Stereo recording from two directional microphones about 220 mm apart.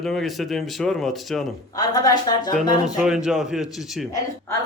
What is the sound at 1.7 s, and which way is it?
Speech, 15° left (ahead or behind).